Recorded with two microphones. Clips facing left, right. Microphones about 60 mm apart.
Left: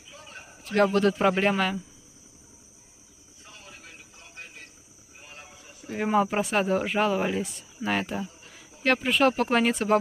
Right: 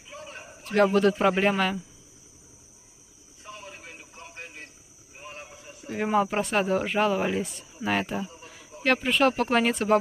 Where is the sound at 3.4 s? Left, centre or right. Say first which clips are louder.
Right 6 dB; right.